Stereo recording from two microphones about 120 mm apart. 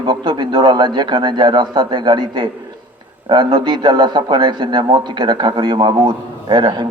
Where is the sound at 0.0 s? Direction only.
40° right (ahead or behind).